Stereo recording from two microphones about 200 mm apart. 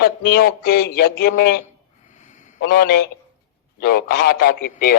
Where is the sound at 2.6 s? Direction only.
50° left (ahead or behind).